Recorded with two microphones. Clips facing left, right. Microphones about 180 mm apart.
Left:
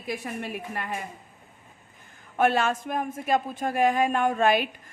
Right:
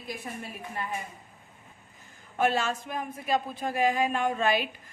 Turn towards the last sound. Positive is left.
turn(degrees=50)  # may be behind; listen again after turning